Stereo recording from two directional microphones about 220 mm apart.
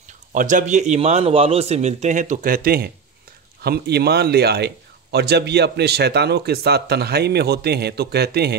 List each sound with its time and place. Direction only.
0.3 s a man's voice: 35° right (ahead or behind)